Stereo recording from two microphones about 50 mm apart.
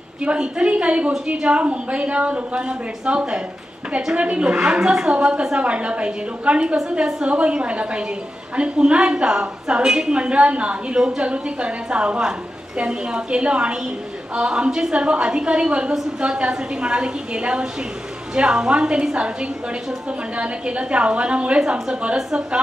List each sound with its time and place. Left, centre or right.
0.2 s a woman's voice: right
6.8 s a woman's voice: centre